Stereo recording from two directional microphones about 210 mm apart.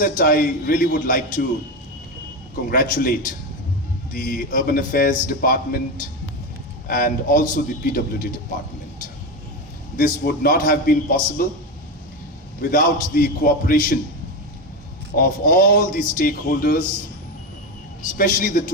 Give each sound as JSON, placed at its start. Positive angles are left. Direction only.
{"t": 0.2, "sound": "a man's voice", "side_deg": 40}
{"t": 2.6, "sound": "a man's voice", "side_deg": 45}
{"t": 6.8, "sound": "a man's voice", "side_deg": 40}
{"t": 10.0, "sound": "a man's voice", "side_deg": 40}
{"t": 12.6, "sound": "a man's voice", "side_deg": 40}
{"t": 15.1, "sound": "a man's voice", "side_deg": 40}
{"t": 18.0, "sound": "a man's voice", "side_deg": 40}